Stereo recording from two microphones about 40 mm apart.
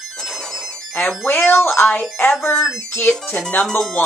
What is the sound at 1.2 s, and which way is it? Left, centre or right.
Speech, left.